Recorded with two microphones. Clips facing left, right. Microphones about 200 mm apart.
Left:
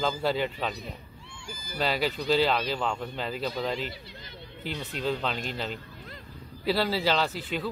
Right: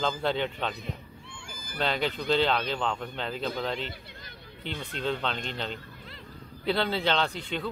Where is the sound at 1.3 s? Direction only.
55° right (ahead or behind).